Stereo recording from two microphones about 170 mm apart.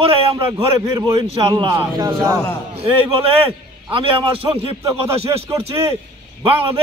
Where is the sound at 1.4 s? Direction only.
30° right (ahead or behind).